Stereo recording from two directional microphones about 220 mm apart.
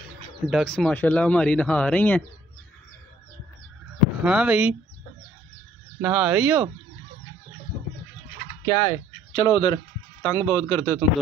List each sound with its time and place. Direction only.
0.5 s speech: centre (ahead or behind)
4.2 s speech: 5° right (ahead or behind)
5.9 s speech: 5° right (ahead or behind)
8.6 s a man's voice: 25° left (ahead or behind)